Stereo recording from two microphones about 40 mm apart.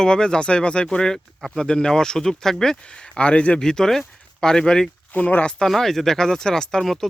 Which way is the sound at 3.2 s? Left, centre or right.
Left.